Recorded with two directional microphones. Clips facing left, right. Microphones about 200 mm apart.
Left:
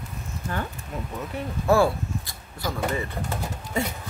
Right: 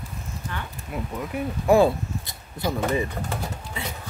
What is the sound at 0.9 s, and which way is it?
Speech, 10° right (ahead or behind).